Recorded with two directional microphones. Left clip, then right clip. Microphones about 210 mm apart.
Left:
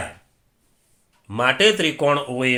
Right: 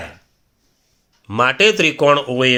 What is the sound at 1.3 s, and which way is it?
Speech, 40° right (ahead or behind).